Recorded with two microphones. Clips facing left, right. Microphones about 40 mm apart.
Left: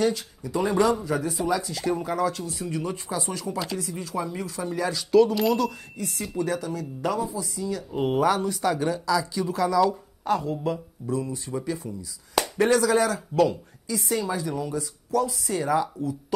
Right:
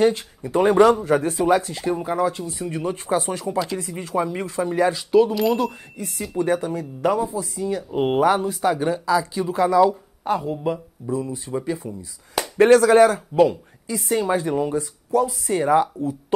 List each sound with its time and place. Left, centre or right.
0.0 s speech: right
1.7 s speech: right
5.5 s speech: right
6.3 s speech: right
12.5 s speech: right